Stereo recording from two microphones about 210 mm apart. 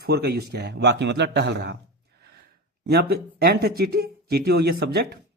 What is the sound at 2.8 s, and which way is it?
Speech, 50° right (ahead or behind).